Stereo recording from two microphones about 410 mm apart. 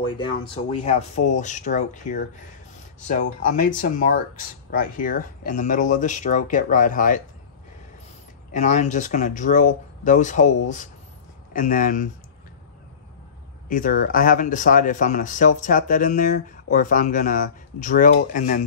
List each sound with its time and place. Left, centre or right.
0.0 s speech: centre
8.5 s speech: centre
13.7 s speech: centre